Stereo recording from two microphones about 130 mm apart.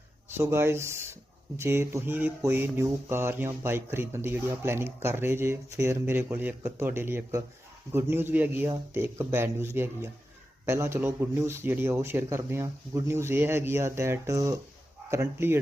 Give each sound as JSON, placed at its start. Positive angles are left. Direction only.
{"t": 0.3, "sound": "a man's voice", "side_deg": -20}